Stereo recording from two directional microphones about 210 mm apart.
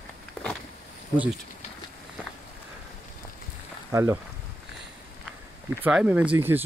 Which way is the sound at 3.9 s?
15° right (ahead or behind).